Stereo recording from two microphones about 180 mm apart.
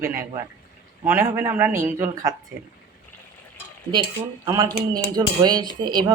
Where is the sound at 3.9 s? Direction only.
25° right (ahead or behind).